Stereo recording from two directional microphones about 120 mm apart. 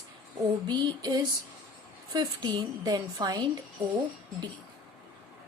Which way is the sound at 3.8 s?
60° right (ahead or behind).